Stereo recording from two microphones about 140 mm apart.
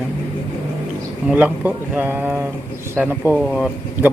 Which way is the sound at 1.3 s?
10° right (ahead or behind).